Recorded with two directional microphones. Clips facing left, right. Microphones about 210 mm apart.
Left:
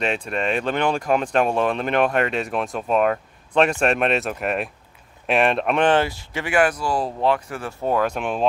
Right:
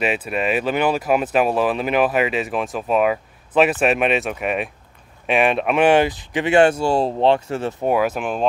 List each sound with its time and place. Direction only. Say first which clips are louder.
0.0 s speech: right 2 dB; 5° right (ahead or behind); by 7.9 s 25° right (ahead or behind)
7.9 s speech: right 1 dB; 5° right (ahead or behind)